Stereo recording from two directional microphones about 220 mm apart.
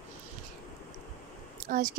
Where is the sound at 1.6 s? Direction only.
35° right (ahead or behind).